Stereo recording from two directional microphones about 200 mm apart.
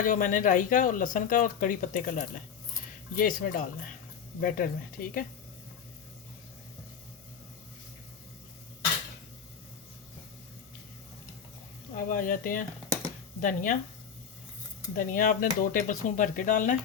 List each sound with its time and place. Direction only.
0.0 s speech: 40° left (ahead or behind)
11.9 s speech: 45° left (ahead or behind)
14.9 s speech: 45° left (ahead or behind)